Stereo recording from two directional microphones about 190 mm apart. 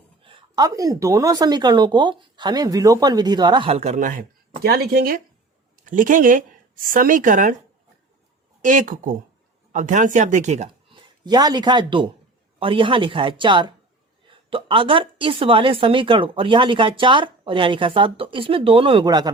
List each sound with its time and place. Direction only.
0.2 s a woman's voice: 30° right (ahead or behind); by 4.3 s 45° right (ahead or behind)
4.6 s a woman's voice: 55° right (ahead or behind)
8.6 s a woman's voice: 40° right (ahead or behind); by 19.3 s 20° right (ahead or behind)